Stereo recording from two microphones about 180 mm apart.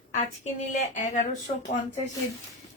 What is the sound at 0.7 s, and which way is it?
Speech, 45° left (ahead or behind).